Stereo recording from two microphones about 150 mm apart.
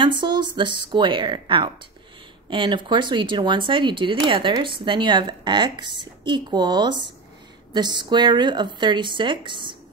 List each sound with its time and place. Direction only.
0.0 s speech: 30° right (ahead or behind)